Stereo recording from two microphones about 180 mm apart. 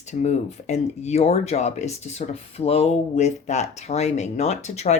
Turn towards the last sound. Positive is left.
turn(degrees=40)  # may be behind; listen again after turning